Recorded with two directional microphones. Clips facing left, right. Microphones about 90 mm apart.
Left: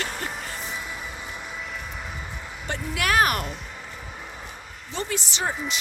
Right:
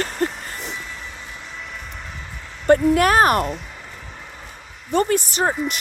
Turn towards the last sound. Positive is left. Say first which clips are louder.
# right 7 dB
turn(degrees=-45)  # may be behind; listen again after turning